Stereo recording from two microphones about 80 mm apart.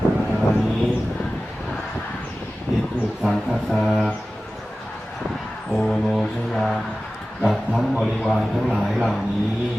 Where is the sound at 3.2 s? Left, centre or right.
Centre.